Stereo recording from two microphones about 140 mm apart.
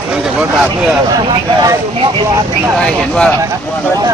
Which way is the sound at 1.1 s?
30° right (ahead or behind).